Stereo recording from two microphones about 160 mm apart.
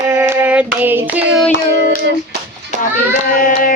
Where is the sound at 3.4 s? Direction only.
55° left (ahead or behind).